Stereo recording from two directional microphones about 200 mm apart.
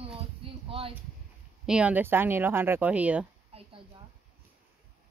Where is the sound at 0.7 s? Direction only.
25° right (ahead or behind).